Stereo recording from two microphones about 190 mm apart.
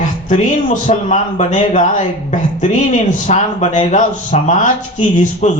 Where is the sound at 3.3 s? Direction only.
40° left (ahead or behind).